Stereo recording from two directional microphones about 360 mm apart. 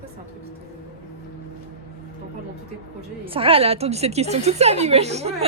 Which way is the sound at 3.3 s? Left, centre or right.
Centre.